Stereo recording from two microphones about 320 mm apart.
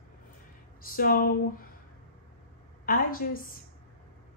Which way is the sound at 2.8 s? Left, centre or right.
Left.